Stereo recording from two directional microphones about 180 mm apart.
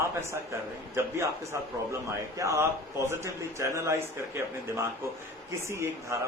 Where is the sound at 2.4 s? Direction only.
15° right (ahead or behind).